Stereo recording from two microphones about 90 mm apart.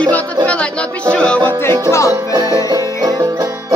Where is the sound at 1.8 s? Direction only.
30° left (ahead or behind).